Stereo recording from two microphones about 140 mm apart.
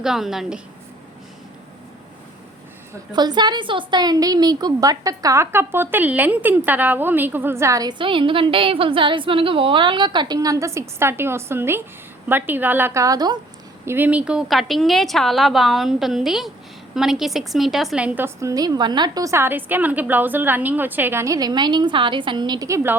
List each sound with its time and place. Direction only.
0.0 s a woman's voice: 5° right (ahead or behind)
3.1 s a woman's voice: 30° right (ahead or behind)
13.8 s a woman's voice: 15° right (ahead or behind)